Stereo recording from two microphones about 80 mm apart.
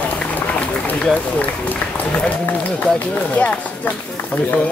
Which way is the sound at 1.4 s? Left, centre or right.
Left.